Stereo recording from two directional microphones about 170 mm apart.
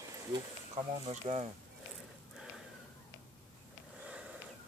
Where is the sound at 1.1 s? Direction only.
35° right (ahead or behind).